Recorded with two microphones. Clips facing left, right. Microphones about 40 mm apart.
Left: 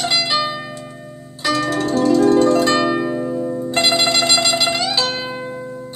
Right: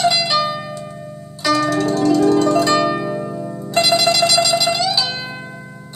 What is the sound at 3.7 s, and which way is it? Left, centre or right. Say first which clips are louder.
Music: right 2 dB; left.